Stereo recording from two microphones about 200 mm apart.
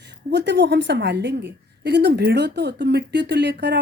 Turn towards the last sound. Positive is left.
turn(degrees=-60)  # may be behind; listen again after turning